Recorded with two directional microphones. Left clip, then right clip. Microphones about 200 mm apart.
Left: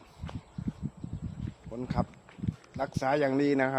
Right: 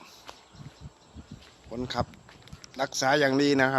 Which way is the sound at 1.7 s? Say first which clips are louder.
Right 3 dB; 20° right (ahead or behind).